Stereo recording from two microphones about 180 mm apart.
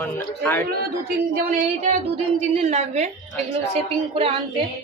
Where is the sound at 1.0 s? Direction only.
55° right (ahead or behind); by 4.3 s 30° right (ahead or behind).